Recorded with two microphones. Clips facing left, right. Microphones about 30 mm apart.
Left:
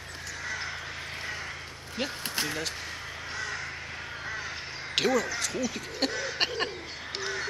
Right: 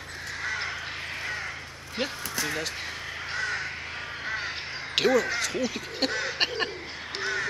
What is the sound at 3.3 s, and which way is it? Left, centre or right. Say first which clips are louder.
Crow: right 5 dB; right.